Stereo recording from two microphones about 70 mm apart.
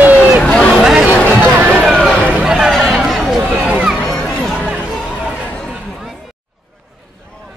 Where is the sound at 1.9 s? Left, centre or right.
Centre.